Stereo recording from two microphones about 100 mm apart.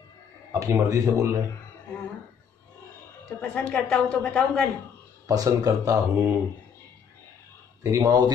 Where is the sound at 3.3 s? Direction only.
10° left (ahead or behind).